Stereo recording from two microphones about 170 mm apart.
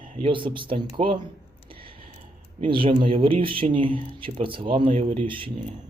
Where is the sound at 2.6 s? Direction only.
30° right (ahead or behind).